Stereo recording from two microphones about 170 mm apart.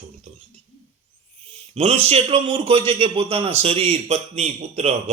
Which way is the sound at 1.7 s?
35° right (ahead or behind).